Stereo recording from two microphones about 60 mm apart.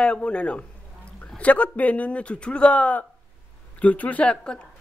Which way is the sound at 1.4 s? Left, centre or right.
Left.